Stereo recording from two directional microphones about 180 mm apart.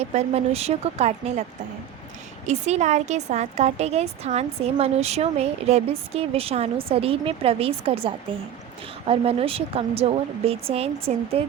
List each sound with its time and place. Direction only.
0.1 s a woman's voice: 35° right (ahead or behind)
2.5 s a woman's voice: 40° right (ahead or behind)